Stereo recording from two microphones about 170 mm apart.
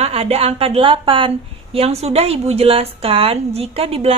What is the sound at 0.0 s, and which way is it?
A woman's voice, 35° right (ahead or behind).